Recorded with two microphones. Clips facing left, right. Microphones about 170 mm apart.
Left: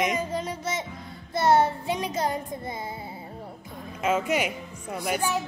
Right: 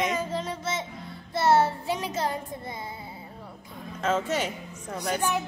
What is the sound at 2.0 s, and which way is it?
Speech, 15° left (ahead or behind).